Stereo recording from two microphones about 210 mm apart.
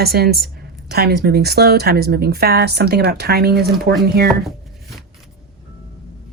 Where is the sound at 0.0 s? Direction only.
50° right (ahead or behind).